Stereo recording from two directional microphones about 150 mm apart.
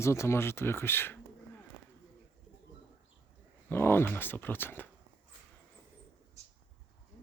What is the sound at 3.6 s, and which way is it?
Speech, 15° left (ahead or behind).